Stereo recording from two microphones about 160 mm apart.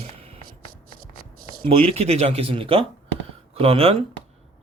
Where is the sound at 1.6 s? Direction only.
35° right (ahead or behind).